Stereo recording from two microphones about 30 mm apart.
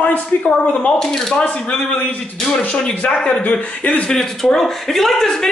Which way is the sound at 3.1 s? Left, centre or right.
Left.